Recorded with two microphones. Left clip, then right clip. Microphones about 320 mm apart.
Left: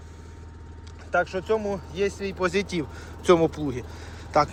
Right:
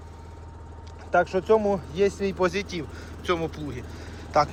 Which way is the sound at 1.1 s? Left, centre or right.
Centre.